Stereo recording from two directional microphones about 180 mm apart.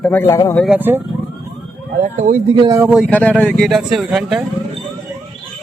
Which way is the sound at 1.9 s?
40° right (ahead or behind).